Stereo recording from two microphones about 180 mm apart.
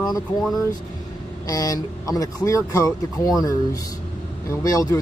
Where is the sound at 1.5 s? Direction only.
20° left (ahead or behind).